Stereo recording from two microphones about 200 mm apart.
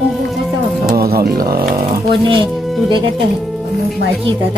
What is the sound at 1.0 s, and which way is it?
Speech, 50° right (ahead or behind).